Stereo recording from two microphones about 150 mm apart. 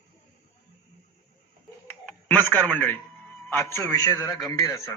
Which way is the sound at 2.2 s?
10° left (ahead or behind).